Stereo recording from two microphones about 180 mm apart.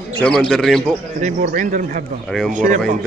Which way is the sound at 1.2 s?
45° right (ahead or behind).